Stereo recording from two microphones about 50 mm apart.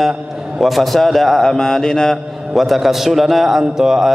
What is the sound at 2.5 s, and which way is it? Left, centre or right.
A man's voice, centre.